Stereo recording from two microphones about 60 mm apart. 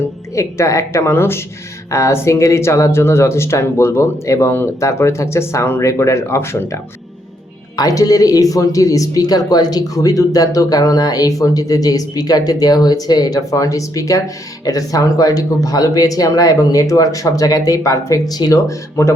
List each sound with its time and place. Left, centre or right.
0.3 s a woman's voice: left
1.1 s speech: left
1.9 s speech: left
7.8 s speech: left
14.6 s speech: left